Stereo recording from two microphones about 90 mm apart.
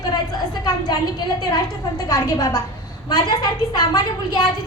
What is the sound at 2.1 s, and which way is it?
Speech, 45° left (ahead or behind).